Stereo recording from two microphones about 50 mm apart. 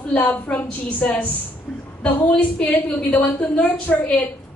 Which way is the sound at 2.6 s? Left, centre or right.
Left.